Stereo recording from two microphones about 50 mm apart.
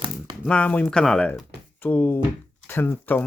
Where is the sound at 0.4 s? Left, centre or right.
Left.